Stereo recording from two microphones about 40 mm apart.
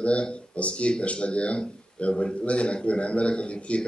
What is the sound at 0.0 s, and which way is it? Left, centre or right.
Speech, left.